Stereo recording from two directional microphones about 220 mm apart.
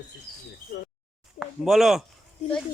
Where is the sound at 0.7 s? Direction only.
45° left (ahead or behind).